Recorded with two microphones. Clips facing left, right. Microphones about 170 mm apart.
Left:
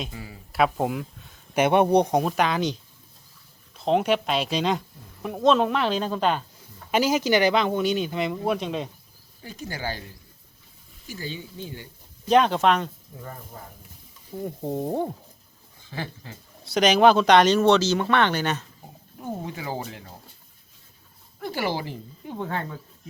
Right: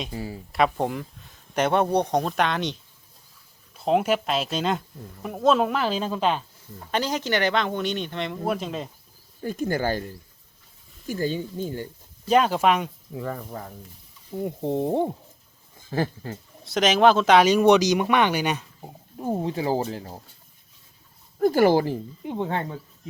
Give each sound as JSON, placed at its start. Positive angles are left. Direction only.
{"t": 0.1, "sound": "speech", "side_deg": -30}
{"t": 0.5, "sound": "speech", "side_deg": 5}
{"t": 1.6, "sound": "speech", "side_deg": 15}
{"t": 3.8, "sound": "speech", "side_deg": -5}
{"t": 9.4, "sound": "speech", "side_deg": -50}
{"t": 12.3, "sound": "speech", "side_deg": -5}
{"t": 13.1, "sound": "speech", "side_deg": -90}
{"t": 14.3, "sound": "speech", "side_deg": -20}
{"t": 15.9, "sound": "speech", "side_deg": -45}
{"t": 16.6, "sound": "speech", "side_deg": 0}
{"t": 19.2, "sound": "speech", "side_deg": -30}
{"t": 21.3, "sound": "speech", "side_deg": -45}
{"t": 22.2, "sound": "speech", "side_deg": -20}